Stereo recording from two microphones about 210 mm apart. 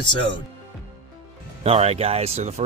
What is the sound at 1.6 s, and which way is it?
Speech, 30° right (ahead or behind).